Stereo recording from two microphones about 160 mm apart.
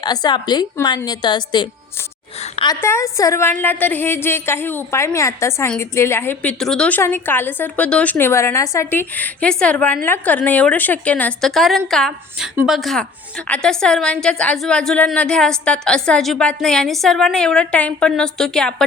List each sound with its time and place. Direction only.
0.0 s a woman's voice: 25° left (ahead or behind)
2.6 s a woman's voice: 20° left (ahead or behind)